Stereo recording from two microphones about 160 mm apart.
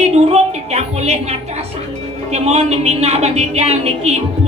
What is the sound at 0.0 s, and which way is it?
A woman's voice, 40° right (ahead or behind).